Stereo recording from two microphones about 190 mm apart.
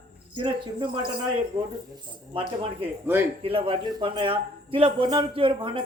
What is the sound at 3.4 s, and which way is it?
Speech, 30° right (ahead or behind).